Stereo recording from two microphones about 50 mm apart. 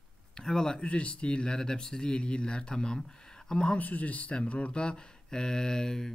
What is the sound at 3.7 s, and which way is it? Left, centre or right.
Speech, left.